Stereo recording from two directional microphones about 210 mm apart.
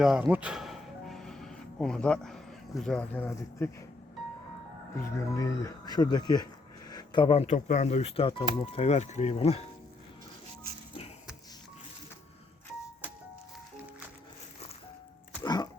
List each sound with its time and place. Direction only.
0.0 s music: 5° right (ahead or behind)
5.0 s speech: 15° left (ahead or behind); by 9.6 s 30° left (ahead or behind)
15.4 s pig: 20° left (ahead or behind)